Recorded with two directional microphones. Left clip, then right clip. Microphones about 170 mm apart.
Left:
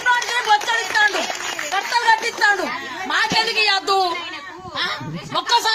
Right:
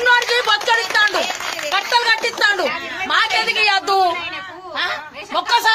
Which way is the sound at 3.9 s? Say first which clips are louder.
Right 3 dB; 20° right (ahead or behind).